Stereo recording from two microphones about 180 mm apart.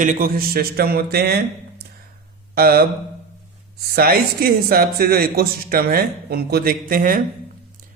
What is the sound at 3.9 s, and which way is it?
Speech, 55° right (ahead or behind).